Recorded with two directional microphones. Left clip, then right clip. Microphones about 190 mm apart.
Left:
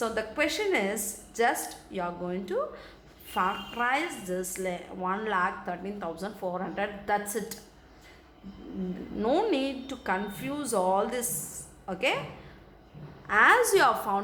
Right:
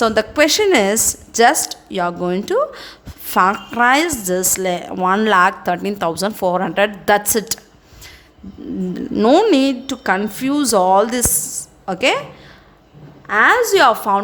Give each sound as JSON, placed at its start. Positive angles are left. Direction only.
{"t": 0.0, "sound": "a woman's voice", "side_deg": -55}
{"t": 9.1, "sound": "speech", "side_deg": -50}
{"t": 13.2, "sound": "a woman's voice", "side_deg": -40}